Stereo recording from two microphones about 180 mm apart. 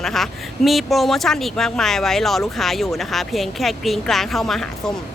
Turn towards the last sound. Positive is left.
turn(degrees=0)  # may be behind; listen again after turning